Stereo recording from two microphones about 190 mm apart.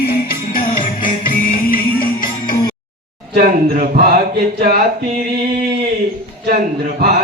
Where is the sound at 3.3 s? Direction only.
50° right (ahead or behind).